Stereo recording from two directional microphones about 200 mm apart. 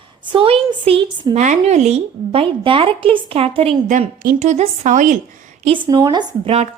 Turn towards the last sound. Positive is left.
turn(degrees=-30)  # may be behind; listen again after turning